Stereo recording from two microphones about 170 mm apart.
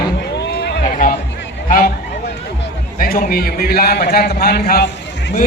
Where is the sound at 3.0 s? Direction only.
60° left (ahead or behind).